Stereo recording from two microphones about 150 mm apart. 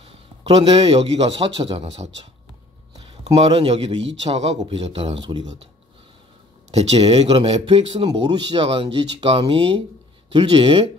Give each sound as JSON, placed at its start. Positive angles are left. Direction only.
{"t": 0.0, "sound": "a man's voice", "side_deg": -45}
{"t": 6.7, "sound": "speech", "side_deg": -45}
{"t": 8.1, "sound": "speech", "side_deg": -30}